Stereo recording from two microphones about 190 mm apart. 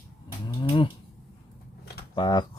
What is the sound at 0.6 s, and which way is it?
Speech, 30° left (ahead or behind).